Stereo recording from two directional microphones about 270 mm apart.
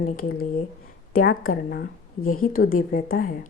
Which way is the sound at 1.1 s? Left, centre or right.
Left.